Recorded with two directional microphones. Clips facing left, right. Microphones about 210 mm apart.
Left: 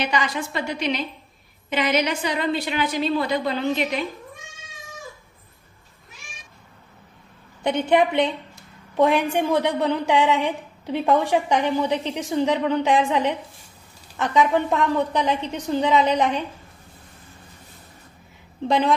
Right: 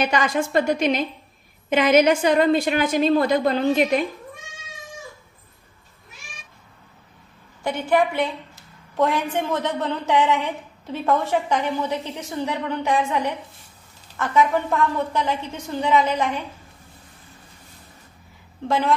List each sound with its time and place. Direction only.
0.0 s a woman's voice: 50° right (ahead or behind)
7.6 s a woman's voice: 20° left (ahead or behind)
18.7 s a woman's voice: 15° left (ahead or behind)